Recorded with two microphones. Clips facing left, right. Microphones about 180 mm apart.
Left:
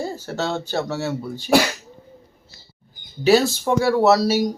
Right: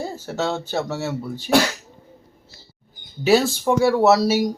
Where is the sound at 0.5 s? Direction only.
Centre (ahead or behind).